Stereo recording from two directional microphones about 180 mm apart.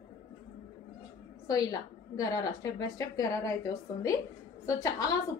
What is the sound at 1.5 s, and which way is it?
A woman's voice, 20° left (ahead or behind).